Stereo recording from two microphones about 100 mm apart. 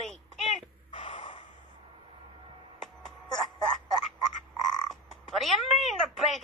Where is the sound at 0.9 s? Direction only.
55° left (ahead or behind).